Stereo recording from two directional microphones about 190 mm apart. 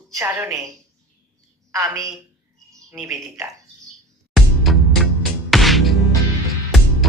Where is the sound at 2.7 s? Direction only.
15° right (ahead or behind).